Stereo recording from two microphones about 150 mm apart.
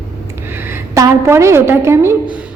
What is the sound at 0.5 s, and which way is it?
A woman's voice, 15° right (ahead or behind).